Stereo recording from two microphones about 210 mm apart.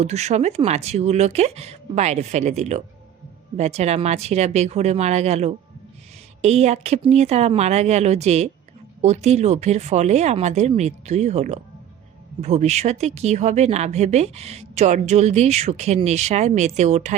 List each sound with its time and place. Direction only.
0.0 s speech: 30° right (ahead or behind)